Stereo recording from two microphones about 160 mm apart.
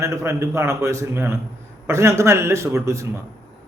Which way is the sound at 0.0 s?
15° right (ahead or behind).